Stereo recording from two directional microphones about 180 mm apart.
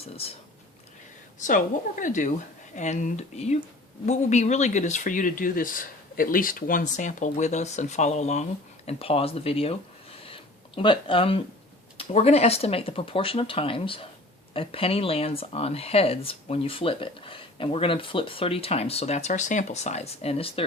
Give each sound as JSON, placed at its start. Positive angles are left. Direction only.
{"t": 0.0, "sound": "speech", "side_deg": 35}
{"t": 1.4, "sound": "speech", "side_deg": 45}